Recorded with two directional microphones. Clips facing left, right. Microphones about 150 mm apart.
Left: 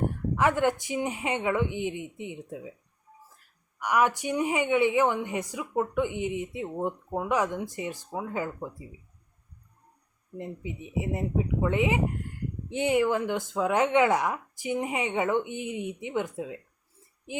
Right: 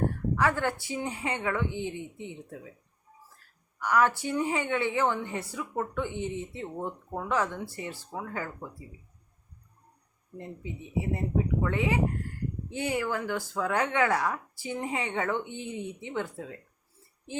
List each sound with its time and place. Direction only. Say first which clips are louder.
0.3 s a woman's voice: left 5 dB; 20° left (ahead or behind)
3.8 s a woman's voice: even; 15° left (ahead or behind)
10.3 s a woman's voice: left 3 dB; 15° left (ahead or behind)